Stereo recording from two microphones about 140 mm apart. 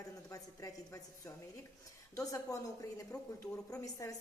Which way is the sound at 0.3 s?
25° left (ahead or behind).